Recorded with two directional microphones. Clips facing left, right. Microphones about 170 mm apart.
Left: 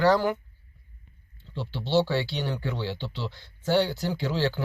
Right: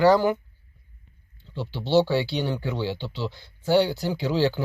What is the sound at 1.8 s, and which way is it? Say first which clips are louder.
Speech: right 4 dB; 10° right (ahead or behind).